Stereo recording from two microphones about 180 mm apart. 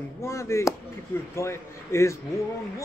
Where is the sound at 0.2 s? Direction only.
15° left (ahead or behind).